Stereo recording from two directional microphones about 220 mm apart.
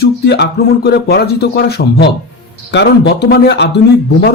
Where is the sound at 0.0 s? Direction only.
45° left (ahead or behind).